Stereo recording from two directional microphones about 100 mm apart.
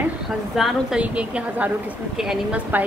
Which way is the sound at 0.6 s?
5° right (ahead or behind).